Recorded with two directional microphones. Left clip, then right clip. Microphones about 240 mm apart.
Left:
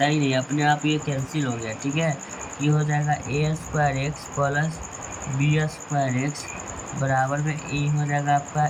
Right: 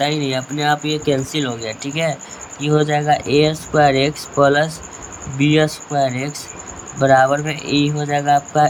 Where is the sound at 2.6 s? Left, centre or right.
Right.